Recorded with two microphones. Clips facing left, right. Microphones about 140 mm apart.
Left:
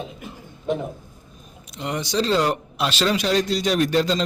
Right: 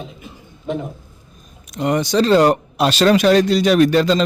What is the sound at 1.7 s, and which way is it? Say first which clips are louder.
Speech: right 7 dB; 50° right (ahead or behind).